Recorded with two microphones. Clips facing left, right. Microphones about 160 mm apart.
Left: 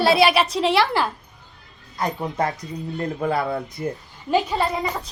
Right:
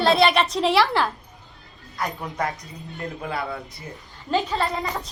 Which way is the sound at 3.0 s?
40° left (ahead or behind).